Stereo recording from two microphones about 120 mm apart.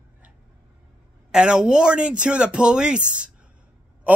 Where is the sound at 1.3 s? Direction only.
5° right (ahead or behind).